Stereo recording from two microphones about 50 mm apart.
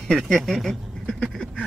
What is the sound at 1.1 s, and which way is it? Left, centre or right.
Speech, centre.